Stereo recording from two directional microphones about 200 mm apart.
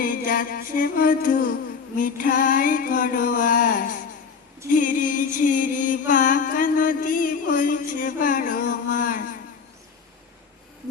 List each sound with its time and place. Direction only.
0.0 s female singing: 40° left (ahead or behind)
4.7 s mantra: 40° left (ahead or behind)